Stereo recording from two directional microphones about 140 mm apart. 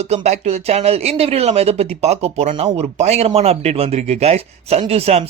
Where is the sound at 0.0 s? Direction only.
55° right (ahead or behind).